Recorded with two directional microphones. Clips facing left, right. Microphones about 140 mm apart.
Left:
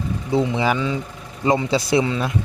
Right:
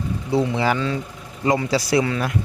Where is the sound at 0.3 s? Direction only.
20° left (ahead or behind).